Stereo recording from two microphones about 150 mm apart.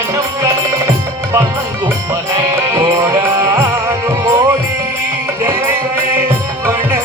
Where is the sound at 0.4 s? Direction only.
20° right (ahead or behind).